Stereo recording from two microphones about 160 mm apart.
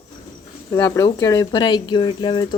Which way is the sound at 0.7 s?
20° left (ahead or behind).